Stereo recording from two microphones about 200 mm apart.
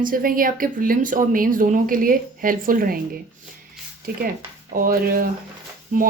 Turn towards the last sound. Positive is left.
turn(degrees=-40)  # may be behind; listen again after turning